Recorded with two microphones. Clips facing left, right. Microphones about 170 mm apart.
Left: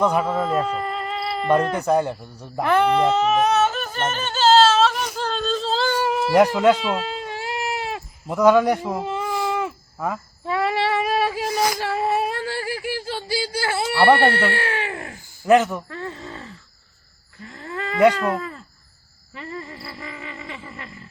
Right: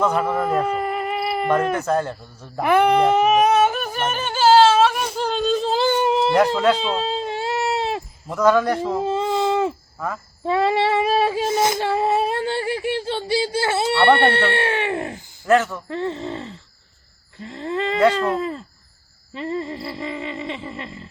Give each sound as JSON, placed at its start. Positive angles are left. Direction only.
{"t": 0.0, "sound": "speech", "side_deg": 15}
{"t": 0.3, "sound": "speech", "side_deg": -10}
{"t": 1.7, "sound": "speech", "side_deg": 15}
{"t": 2.6, "sound": "yodeling", "side_deg": -10}
{"t": 5.1, "sound": "a sound", "side_deg": -15}
{"t": 6.7, "sound": "baby cry", "side_deg": -25}
{"t": 8.3, "sound": "speech", "side_deg": 15}
{"t": 9.0, "sound": "baby cry", "side_deg": -25}
{"t": 10.4, "sound": "female singing", "side_deg": -25}
{"t": 15.4, "sound": "speech", "side_deg": 15}
{"t": 15.9, "sound": "groan", "side_deg": -25}
{"t": 17.4, "sound": "a sound", "side_deg": -25}
{"t": 18.1, "sound": "speech", "side_deg": -20}
{"t": 19.3, "sound": "wild animals", "side_deg": -25}